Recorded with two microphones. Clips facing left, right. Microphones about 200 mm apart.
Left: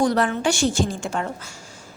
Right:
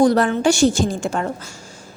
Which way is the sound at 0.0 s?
35° right (ahead or behind).